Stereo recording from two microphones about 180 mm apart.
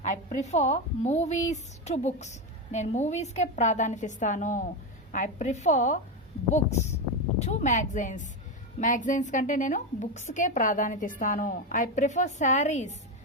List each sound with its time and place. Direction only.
0.0 s a woman's voice: 40° left (ahead or behind)